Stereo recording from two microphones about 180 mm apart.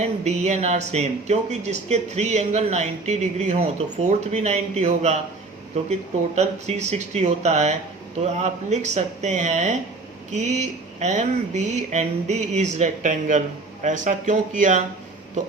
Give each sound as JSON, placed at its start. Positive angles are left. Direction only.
{"t": 0.0, "sound": "speech", "side_deg": -40}
{"t": 6.3, "sound": "speech", "side_deg": -40}